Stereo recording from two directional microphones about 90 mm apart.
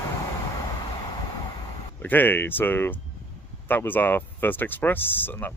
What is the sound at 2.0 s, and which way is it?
Speech, 20° left (ahead or behind).